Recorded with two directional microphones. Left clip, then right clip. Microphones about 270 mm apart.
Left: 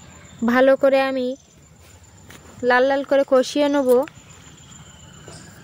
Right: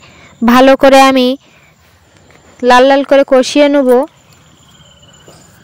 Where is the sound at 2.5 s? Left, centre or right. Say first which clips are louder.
Right 11 dB; right.